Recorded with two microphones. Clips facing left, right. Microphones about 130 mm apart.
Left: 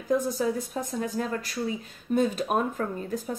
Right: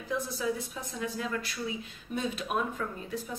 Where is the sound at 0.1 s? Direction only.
45° left (ahead or behind).